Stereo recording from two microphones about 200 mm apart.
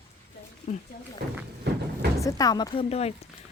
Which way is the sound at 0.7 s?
40° left (ahead or behind).